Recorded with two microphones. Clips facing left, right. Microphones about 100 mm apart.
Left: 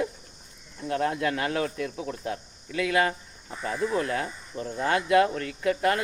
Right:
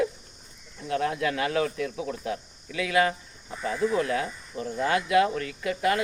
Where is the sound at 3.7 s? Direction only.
40° left (ahead or behind).